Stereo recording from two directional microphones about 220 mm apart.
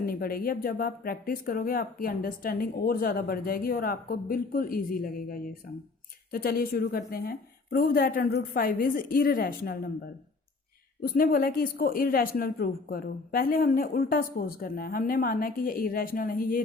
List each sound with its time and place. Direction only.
0.0 s a woman's voice: 40° left (ahead or behind)
11.0 s speech: 40° left (ahead or behind)